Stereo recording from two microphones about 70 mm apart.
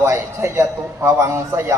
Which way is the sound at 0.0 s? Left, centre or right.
Right.